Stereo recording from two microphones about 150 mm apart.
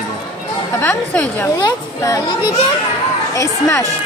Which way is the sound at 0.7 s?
10° left (ahead or behind).